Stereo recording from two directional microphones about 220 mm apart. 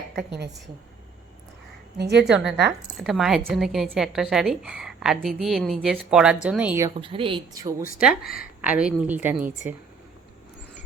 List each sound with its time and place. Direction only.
0.2 s a woman's voice: 50° right (ahead or behind)
2.0 s a woman's voice: 50° right (ahead or behind)
2.3 s speech: centre (ahead or behind)
7.0 s speech: 25° right (ahead or behind)
7.9 s speech: 5° right (ahead or behind)
8.2 s speech: 45° left (ahead or behind)
8.6 s a woman's voice: 5° right (ahead or behind)